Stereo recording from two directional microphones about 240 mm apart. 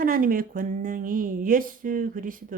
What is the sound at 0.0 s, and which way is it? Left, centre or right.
Speech, right.